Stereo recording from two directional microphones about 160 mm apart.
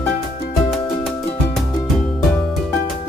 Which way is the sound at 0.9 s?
40° left (ahead or behind).